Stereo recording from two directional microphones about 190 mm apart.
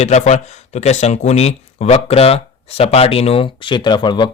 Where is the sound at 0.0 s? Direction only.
35° left (ahead or behind).